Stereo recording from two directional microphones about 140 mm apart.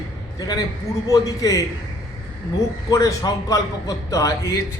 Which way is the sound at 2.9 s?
25° left (ahead or behind).